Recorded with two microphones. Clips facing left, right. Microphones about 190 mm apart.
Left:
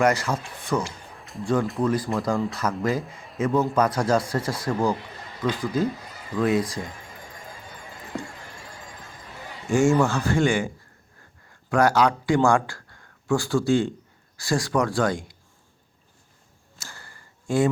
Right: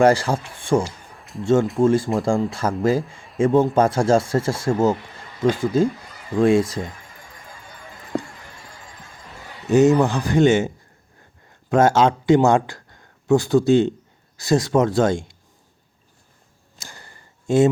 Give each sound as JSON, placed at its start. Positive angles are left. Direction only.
{"t": 0.0, "sound": "speech", "side_deg": -30}
{"t": 1.2, "sound": "a sound", "side_deg": 0}
{"t": 1.8, "sound": "speech", "side_deg": -25}
{"t": 9.6, "sound": "speech", "side_deg": -20}
{"t": 11.7, "sound": "speech", "side_deg": -25}
{"t": 16.7, "sound": "a sound", "side_deg": -20}